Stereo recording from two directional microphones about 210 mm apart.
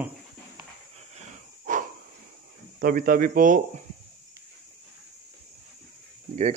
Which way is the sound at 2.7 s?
45° right (ahead or behind).